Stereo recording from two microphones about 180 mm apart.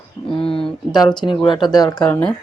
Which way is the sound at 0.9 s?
25° left (ahead or behind).